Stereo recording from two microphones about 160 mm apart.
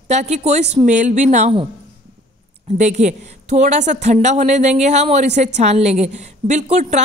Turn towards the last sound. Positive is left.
turn(degrees=-45)  # may be behind; listen again after turning